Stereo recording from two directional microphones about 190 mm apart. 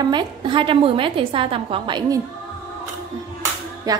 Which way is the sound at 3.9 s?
20° right (ahead or behind).